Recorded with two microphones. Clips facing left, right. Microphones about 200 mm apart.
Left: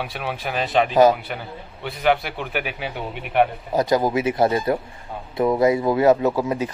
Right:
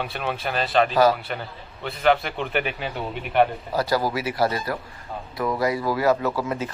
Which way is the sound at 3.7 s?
20° left (ahead or behind).